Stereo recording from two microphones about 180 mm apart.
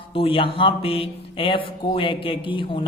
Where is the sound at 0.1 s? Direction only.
30° left (ahead or behind).